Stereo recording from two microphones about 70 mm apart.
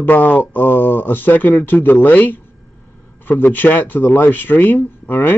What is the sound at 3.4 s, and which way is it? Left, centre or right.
A man's voice, left.